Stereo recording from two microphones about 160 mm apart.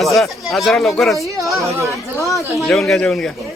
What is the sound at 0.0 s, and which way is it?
Speech, centre (ahead or behind).